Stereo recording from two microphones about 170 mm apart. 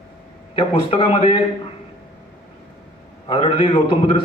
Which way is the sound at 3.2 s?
30° left (ahead or behind).